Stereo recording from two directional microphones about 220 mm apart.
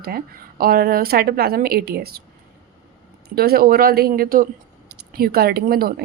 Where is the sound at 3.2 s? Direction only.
45° right (ahead or behind).